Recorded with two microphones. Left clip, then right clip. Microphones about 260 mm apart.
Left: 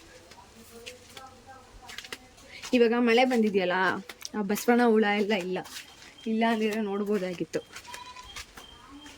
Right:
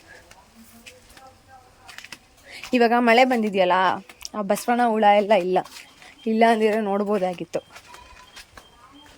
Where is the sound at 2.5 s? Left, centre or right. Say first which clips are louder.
Right 5 dB; centre.